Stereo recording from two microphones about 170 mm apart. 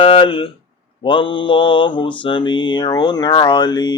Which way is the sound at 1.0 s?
30° left (ahead or behind).